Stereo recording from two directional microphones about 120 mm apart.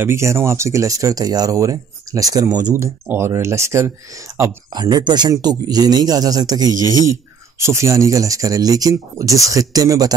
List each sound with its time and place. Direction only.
0.0 s speech: 25° right (ahead or behind)
4.7 s speech: 35° right (ahead or behind)